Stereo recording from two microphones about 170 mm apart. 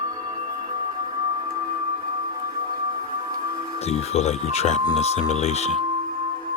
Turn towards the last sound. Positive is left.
turn(degrees=40)  # may be behind; listen again after turning